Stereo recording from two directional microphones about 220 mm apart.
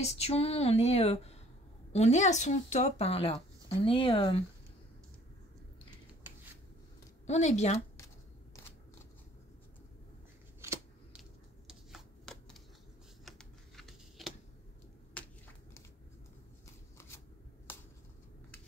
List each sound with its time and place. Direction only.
0.0 s speech: 30° left (ahead or behind)
7.2 s speech: 30° left (ahead or behind)
10.6 s shuffling cards: 10° right (ahead or behind)
13.2 s a sound: centre (ahead or behind)